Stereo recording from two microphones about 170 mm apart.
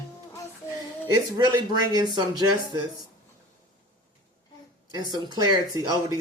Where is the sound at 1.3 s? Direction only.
25° right (ahead or behind).